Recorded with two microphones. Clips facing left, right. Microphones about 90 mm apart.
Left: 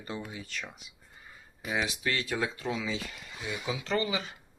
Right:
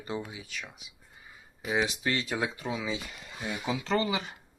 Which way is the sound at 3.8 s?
35° right (ahead or behind).